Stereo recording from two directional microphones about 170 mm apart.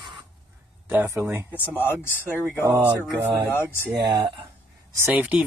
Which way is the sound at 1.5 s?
10° left (ahead or behind).